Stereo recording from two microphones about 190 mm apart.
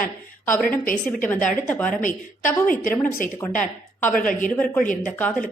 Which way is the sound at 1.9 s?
40° left (ahead or behind).